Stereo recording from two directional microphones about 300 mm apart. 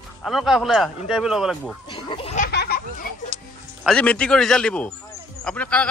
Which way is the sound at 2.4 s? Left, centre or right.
Left.